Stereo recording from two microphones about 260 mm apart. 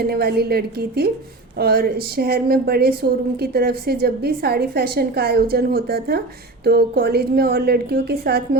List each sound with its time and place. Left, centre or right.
0.0 s a woman's voice: right